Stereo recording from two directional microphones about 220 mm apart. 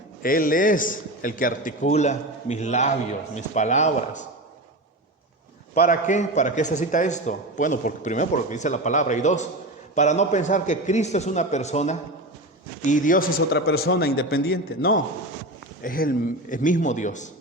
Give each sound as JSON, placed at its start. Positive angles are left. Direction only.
{"t": 0.2, "sound": "a man's voice", "side_deg": 40}
{"t": 5.7, "sound": "a man's voice", "side_deg": 40}